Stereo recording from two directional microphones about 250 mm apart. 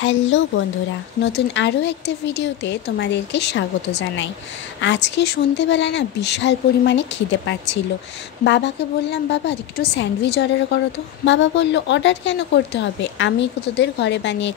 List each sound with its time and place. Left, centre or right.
0.0 s speech: left